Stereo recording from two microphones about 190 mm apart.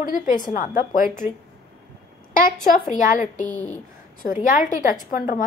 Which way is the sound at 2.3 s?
45° left (ahead or behind).